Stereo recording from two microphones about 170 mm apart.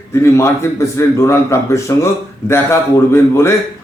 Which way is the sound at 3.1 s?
15° left (ahead or behind).